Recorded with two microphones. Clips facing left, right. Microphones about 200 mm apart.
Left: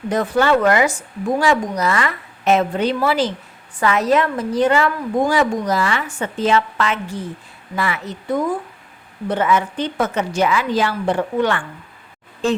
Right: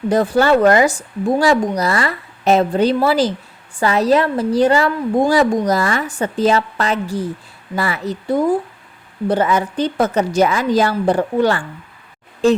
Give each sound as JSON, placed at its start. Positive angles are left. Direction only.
{"t": 0.1, "sound": "a woman's voice", "side_deg": -35}